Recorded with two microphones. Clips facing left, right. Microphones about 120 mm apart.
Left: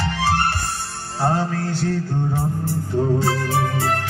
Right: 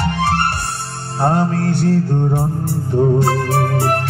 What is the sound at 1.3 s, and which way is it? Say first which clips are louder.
Music: right 5 dB; 60° right (ahead or behind).